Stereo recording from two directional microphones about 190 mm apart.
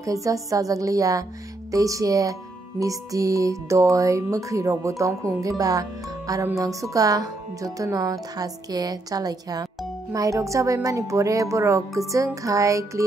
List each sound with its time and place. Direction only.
0.0 s speech: 15° right (ahead or behind)